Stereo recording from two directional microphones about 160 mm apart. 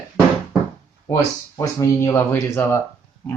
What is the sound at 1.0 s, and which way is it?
Speech, 20° left (ahead or behind).